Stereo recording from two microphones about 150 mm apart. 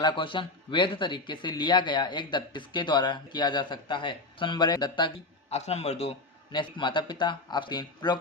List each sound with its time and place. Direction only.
0.0 s speech: 30° left (ahead or behind)
5.5 s a man's voice: 45° left (ahead or behind)
6.5 s speech: 30° left (ahead or behind)